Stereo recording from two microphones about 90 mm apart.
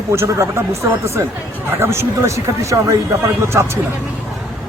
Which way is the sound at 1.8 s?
30° right (ahead or behind).